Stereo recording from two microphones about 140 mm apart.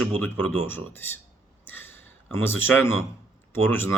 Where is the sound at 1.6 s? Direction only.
15° left (ahead or behind).